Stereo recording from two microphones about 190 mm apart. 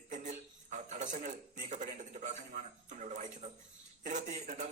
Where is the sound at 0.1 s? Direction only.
40° right (ahead or behind).